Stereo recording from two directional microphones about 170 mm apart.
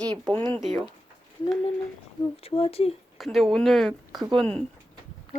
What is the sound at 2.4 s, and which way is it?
Speech, 35° left (ahead or behind).